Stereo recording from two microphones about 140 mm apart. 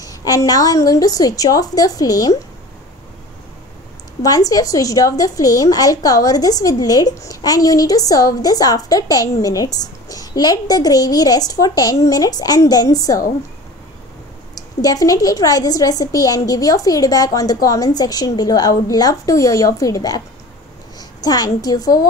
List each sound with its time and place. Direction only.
0.0 s a woman's voice: 25° left (ahead or behind)
4.2 s a woman's voice: 25° left (ahead or behind)
14.5 s a woman's voice: 25° left (ahead or behind)
21.2 s a woman's voice: 25° left (ahead or behind)